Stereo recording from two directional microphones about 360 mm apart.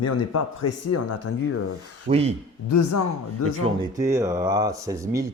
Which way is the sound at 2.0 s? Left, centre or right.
Centre.